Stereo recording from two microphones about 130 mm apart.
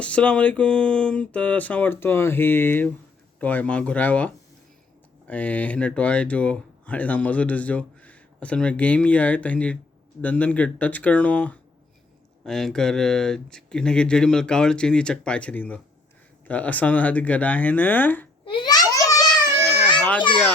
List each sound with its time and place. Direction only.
0.0 s speech: 10° left (ahead or behind)
5.3 s speech: 10° left (ahead or behind)
18.5 s babbling: 30° left (ahead or behind)
20.0 s a sound: 10° left (ahead or behind)